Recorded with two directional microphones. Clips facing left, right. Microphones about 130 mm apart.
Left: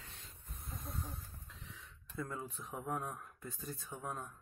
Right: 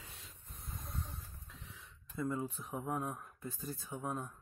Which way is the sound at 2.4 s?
5° right (ahead or behind).